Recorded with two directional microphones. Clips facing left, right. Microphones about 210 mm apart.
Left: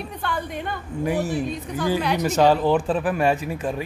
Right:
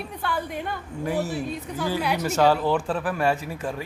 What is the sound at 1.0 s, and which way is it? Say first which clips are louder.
Speech: left 3 dB; 15° left (ahead or behind).